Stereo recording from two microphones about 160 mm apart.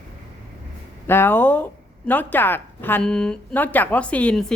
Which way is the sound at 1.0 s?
15° left (ahead or behind).